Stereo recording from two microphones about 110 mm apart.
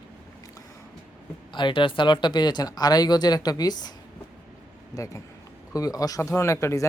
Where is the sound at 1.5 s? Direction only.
45° left (ahead or behind).